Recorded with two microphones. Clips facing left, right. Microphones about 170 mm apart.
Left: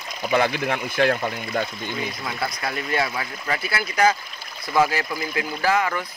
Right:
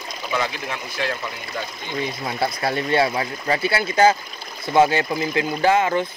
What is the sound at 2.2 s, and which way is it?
Speech, 30° right (ahead or behind).